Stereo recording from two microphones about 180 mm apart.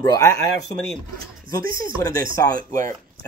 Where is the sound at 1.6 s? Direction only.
55° right (ahead or behind).